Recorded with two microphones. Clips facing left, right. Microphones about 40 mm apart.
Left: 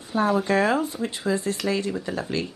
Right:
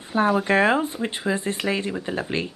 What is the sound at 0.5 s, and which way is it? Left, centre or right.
Speech, right.